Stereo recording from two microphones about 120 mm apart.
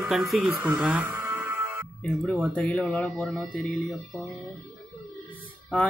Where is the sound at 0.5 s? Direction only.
10° right (ahead or behind).